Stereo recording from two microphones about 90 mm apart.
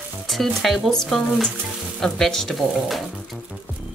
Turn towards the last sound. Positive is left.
turn(degrees=0)  # may be behind; listen again after turning